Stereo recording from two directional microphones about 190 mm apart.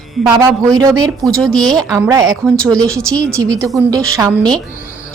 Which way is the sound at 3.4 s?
20° right (ahead or behind).